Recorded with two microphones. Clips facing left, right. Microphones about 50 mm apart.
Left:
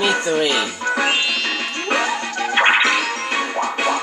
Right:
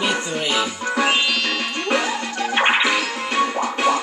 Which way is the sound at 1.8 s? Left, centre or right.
Centre.